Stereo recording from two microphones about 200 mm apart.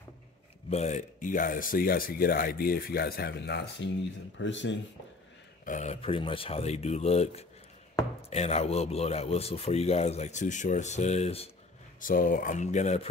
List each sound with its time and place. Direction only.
0.7 s speech: 35° left (ahead or behind); by 4.7 s 65° left (ahead or behind)
5.7 s speech: 35° left (ahead or behind)
12.0 s speech: 45° left (ahead or behind)